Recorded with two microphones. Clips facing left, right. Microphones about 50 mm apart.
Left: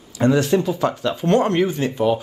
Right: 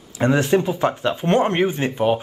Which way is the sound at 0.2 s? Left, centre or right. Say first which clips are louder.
Left 1 dB; right.